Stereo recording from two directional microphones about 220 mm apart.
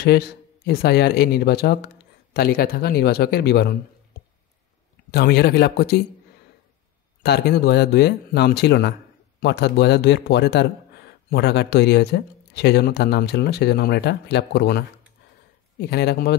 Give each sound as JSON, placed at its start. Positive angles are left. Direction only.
{"t": 0.0, "sound": "speech", "side_deg": 45}
{"t": 5.1, "sound": "speech", "side_deg": 45}
{"t": 7.2, "sound": "speech", "side_deg": 45}